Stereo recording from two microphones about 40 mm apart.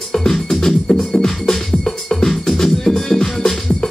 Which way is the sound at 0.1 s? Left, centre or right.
Centre.